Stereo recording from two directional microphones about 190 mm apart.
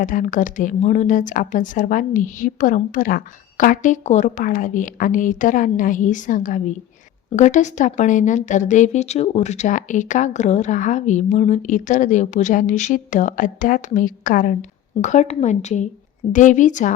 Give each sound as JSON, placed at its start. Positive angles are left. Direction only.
{"t": 0.0, "sound": "speech", "side_deg": 45}